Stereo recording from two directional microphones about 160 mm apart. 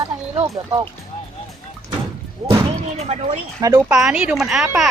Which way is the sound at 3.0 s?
45° right (ahead or behind).